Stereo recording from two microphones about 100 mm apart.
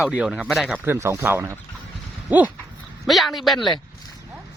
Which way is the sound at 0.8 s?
25° right (ahead or behind).